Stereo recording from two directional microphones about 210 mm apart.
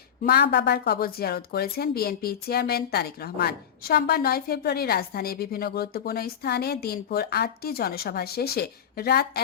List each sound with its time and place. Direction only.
0.3 s a woman's voice: 50° left (ahead or behind)